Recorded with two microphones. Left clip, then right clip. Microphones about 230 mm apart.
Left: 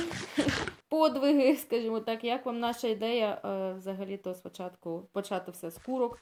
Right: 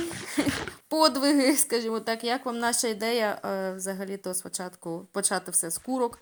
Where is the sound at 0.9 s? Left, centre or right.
Right.